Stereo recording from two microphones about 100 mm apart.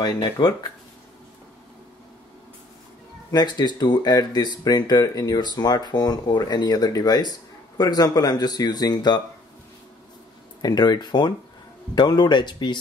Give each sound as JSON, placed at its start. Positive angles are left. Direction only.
{"t": 0.0, "sound": "speech", "side_deg": 45}
{"t": 3.3, "sound": "speech", "side_deg": 45}
{"t": 10.6, "sound": "speech", "side_deg": 45}